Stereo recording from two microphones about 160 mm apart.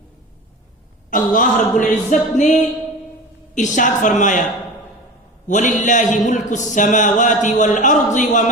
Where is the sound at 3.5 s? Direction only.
50° left (ahead or behind).